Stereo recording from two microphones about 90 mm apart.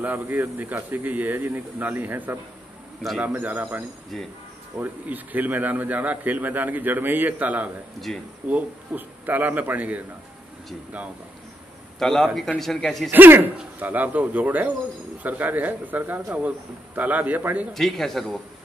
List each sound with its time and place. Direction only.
0.0 s a man's voice: 20° right (ahead or behind)
3.3 s a man's voice: 20° right (ahead or behind)
8.1 s speech: 5° left (ahead or behind)
8.5 s a man's voice: 20° right (ahead or behind)
12.0 s speech: 5° left (ahead or behind)
13.1 s a man's voice: 20° right (ahead or behind)
17.7 s speech: 5° left (ahead or behind)